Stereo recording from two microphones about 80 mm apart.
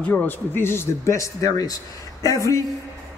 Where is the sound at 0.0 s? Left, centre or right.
Left.